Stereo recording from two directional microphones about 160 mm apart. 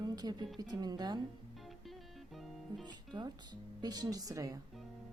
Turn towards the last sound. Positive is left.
turn(degrees=-20)  # may be behind; listen again after turning